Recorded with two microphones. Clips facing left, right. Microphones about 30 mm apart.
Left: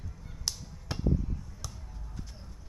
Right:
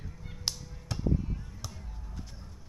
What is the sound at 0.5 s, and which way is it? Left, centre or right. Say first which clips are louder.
Honk: right 1 dB; right.